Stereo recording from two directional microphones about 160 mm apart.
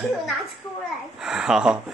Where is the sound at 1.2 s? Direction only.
5° right (ahead or behind).